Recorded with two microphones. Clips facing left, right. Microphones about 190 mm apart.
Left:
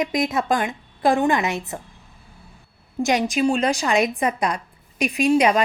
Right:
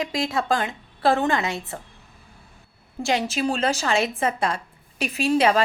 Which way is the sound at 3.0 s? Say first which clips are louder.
Left 4 dB; 20° left (ahead or behind).